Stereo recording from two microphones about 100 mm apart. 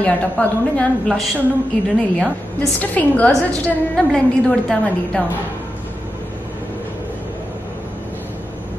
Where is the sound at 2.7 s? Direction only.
15° left (ahead or behind).